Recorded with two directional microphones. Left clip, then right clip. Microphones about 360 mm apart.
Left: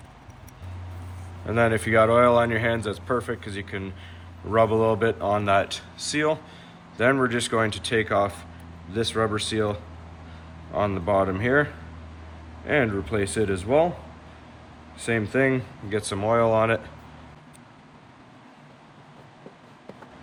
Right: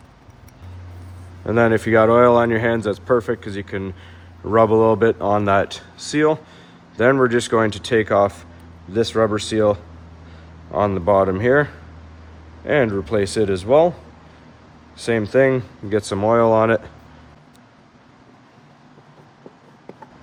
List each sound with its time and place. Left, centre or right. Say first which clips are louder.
1.5 s speech: right 6 dB; right
15.0 s speech: right 7 dB; right